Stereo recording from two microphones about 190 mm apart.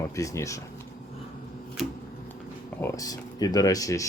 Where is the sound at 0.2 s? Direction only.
15° left (ahead or behind).